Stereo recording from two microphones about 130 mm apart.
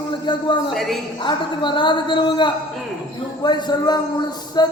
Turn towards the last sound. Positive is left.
turn(degrees=30)  # may be behind; listen again after turning